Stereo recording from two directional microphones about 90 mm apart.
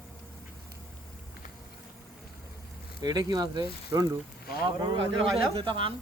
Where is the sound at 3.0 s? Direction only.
45° right (ahead or behind).